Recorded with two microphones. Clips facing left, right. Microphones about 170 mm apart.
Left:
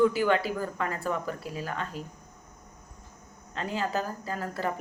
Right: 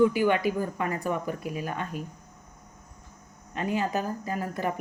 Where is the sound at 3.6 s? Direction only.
15° right (ahead or behind).